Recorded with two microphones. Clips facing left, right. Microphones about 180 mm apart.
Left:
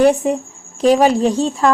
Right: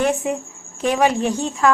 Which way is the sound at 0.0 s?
35° left (ahead or behind).